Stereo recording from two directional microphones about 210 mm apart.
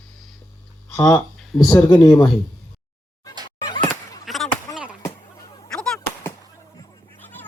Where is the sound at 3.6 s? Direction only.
20° left (ahead or behind).